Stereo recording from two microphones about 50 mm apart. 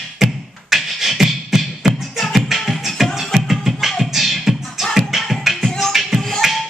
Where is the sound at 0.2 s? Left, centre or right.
Centre.